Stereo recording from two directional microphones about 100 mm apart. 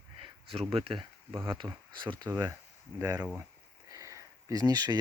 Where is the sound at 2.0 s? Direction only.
50° right (ahead or behind).